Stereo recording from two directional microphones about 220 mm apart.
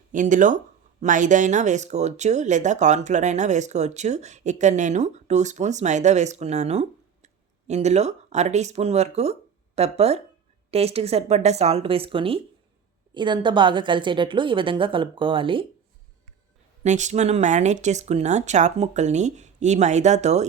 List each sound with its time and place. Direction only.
0.1 s a woman's voice: 35° right (ahead or behind)
16.8 s speech: 35° right (ahead or behind)